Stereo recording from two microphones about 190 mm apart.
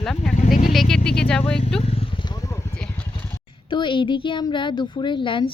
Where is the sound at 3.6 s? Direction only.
25° left (ahead or behind).